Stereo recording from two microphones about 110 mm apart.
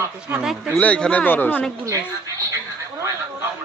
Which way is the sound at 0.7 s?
10° left (ahead or behind).